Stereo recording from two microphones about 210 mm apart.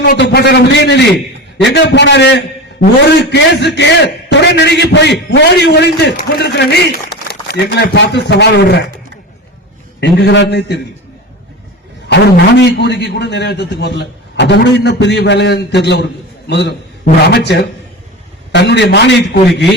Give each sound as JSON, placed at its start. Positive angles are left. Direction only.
{"t": 0.0, "sound": "a man's voice", "side_deg": 55}
{"t": 10.0, "sound": "a man's voice", "side_deg": 55}
{"t": 12.0, "sound": "a man's voice", "side_deg": 55}